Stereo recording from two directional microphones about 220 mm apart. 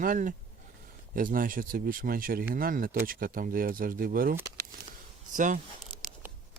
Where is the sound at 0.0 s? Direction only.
35° right (ahead or behind).